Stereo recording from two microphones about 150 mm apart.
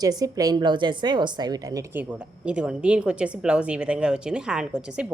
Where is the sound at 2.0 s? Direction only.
10° right (ahead or behind).